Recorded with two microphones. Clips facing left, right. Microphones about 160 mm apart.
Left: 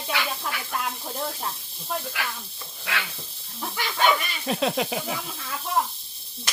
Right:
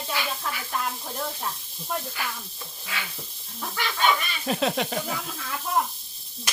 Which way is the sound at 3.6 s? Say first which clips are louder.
Even; 10° left (ahead or behind).